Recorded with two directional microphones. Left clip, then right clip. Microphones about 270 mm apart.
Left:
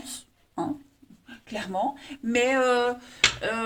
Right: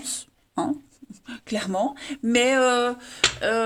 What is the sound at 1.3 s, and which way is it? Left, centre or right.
Speech, right.